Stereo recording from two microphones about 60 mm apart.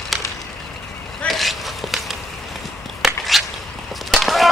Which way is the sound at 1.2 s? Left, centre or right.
Centre.